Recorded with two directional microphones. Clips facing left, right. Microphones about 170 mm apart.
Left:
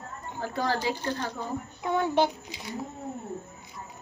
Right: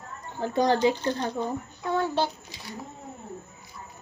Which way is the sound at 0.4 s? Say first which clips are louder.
Right 6 dB; 20° right (ahead or behind).